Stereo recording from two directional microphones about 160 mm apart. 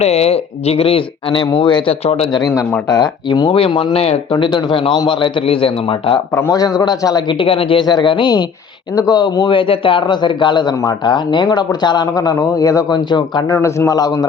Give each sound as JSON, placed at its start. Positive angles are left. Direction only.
{"t": 0.0, "sound": "speech", "side_deg": 40}
{"t": 2.9, "sound": "speech", "side_deg": 25}
{"t": 6.3, "sound": "a man's voice", "side_deg": 25}